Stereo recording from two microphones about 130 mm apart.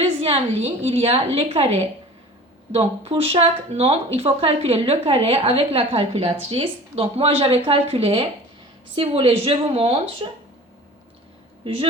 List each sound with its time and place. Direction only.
0.0 s speech: 50° right (ahead or behind)
11.6 s a woman's voice: 45° right (ahead or behind)